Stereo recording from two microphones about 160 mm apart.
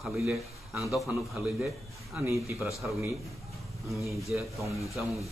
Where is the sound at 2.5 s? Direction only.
Centre (ahead or behind).